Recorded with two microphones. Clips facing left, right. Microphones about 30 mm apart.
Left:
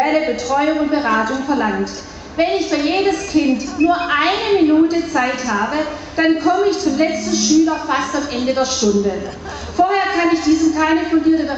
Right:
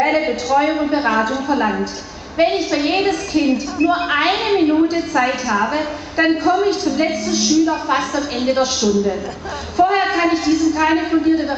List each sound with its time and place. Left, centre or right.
0.0 s a sound: centre
0.6 s a woman's voice: centre
4.8 s a woman's voice: centre
5.2 s a woman's voice: centre